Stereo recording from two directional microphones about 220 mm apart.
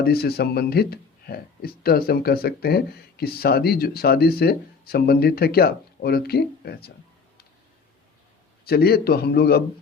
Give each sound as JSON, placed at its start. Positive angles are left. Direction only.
{"t": 0.0, "sound": "speech", "side_deg": 45}
{"t": 8.6, "sound": "speech", "side_deg": 45}